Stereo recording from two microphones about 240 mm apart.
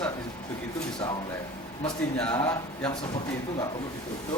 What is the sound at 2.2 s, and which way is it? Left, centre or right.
Speech, centre.